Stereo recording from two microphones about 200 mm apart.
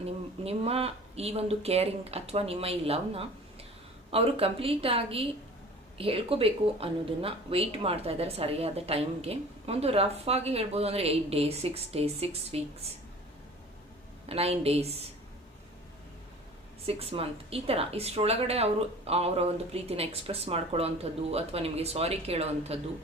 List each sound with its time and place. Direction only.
0.0 s speech: 30° right (ahead or behind)
14.3 s speech: 30° right (ahead or behind)
16.8 s speech: 30° right (ahead or behind)